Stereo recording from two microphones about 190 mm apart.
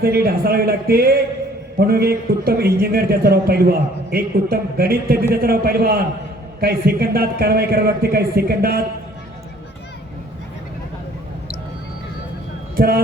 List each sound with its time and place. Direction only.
0.0 s a man's voice: 55° right (ahead or behind)
12.7 s speech: 55° right (ahead or behind)